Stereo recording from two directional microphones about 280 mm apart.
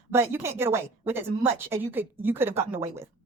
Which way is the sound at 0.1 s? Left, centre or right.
Centre.